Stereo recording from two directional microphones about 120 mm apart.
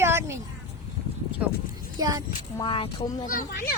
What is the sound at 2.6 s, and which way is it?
Speech, 45° left (ahead or behind).